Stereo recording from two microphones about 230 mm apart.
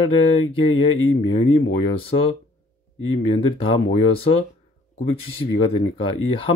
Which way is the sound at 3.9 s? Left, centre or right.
Left.